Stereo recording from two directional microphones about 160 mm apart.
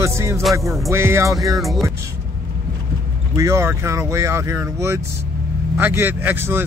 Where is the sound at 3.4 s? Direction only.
15° right (ahead or behind).